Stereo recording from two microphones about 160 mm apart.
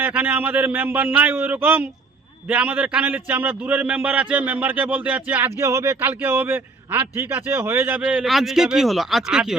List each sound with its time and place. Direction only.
0.0 s a man's voice: 10° right (ahead or behind)